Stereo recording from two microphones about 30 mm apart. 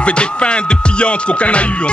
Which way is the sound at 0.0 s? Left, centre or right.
Left.